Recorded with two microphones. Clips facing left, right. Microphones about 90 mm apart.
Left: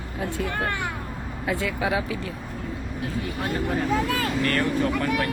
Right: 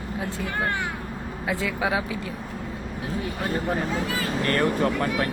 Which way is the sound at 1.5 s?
20° right (ahead or behind).